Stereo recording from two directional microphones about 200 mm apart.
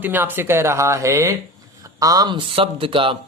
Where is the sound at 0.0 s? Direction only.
10° right (ahead or behind).